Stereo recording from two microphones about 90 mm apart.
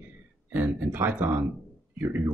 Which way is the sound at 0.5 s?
20° right (ahead or behind).